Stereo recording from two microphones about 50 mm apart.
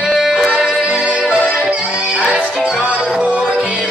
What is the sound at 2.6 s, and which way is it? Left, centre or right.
Music, centre.